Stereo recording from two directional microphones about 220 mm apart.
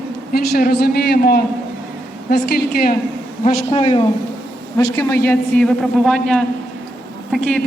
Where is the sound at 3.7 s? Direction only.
25° left (ahead or behind).